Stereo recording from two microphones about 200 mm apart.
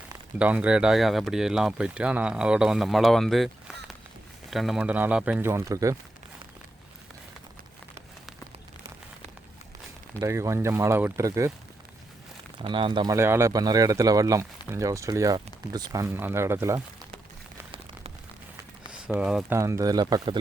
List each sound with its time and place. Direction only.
0.3 s speech: 5° right (ahead or behind)
10.2 s speech: 15° right (ahead or behind)
12.6 s speech: 25° right (ahead or behind)
13.1 s speech: 10° right (ahead or behind)
18.9 s speech: 5° right (ahead or behind); by 20.4 s 20° right (ahead or behind)